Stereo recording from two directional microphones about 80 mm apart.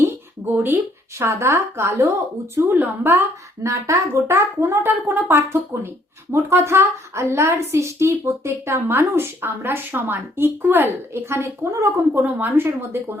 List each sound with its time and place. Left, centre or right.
0.5 s a woman's voice: right
5.0 s a woman's voice: right
5.7 s a woman's voice: right
12.1 s a woman's voice: right